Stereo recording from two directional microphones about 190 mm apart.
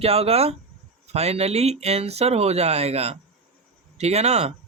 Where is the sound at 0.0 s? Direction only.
30° right (ahead or behind).